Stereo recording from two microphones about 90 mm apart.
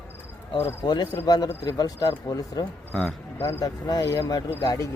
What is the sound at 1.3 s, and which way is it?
Speech, 45° left (ahead or behind).